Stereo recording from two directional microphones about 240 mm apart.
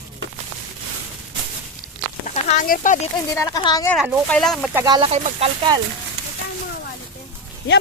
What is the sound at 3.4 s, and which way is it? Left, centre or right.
Speech, centre.